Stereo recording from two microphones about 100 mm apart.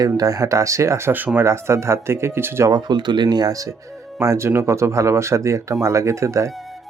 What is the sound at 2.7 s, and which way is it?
Speech, 45° right (ahead or behind).